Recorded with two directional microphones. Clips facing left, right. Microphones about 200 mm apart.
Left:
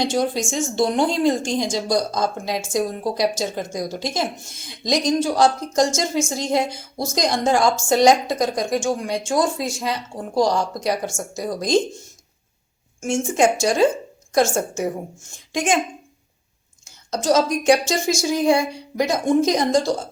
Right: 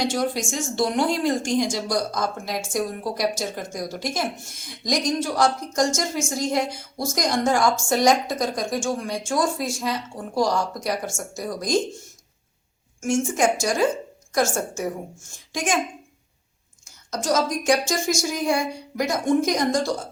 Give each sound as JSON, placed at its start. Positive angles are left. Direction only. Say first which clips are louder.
{"t": 0.0, "sound": "a woman's voice", "louder": "left 3 dB", "side_deg": 20}
{"t": 13.0, "sound": "a woman's voice", "louder": "left 3 dB", "side_deg": 25}
{"t": 15.5, "sound": "a woman's voice", "louder": "left 4 dB", "side_deg": 20}
{"t": 17.1, "sound": "a woman's voice", "louder": "left 4 dB", "side_deg": 25}